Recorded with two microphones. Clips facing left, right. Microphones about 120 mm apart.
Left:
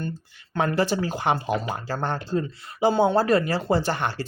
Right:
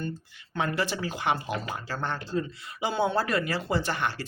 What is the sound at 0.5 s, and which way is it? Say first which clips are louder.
Speech: left 6 dB; 40° left (ahead or behind).